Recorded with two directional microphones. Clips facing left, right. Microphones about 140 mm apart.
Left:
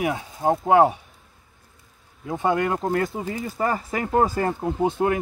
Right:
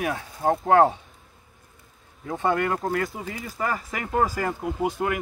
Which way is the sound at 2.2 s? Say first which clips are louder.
Left 2 dB; 15° left (ahead or behind).